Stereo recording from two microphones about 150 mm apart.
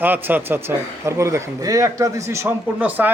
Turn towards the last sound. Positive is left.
turn(degrees=-10)  # may be behind; listen again after turning